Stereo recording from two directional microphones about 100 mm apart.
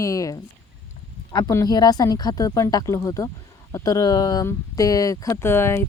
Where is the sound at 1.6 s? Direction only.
40° left (ahead or behind).